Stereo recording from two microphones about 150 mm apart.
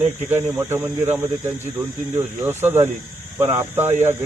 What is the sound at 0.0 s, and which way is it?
Speech, 15° right (ahead or behind).